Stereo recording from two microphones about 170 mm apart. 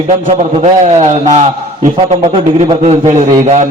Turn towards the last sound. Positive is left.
turn(degrees=-40)  # may be behind; listen again after turning